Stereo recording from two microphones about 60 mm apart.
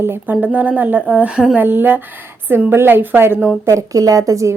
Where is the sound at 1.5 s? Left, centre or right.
Right.